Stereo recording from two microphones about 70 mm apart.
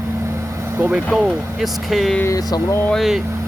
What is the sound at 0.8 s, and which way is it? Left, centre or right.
Speech, right.